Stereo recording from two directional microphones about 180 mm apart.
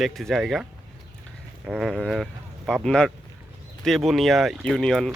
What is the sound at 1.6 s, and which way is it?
Speech, centre (ahead or behind).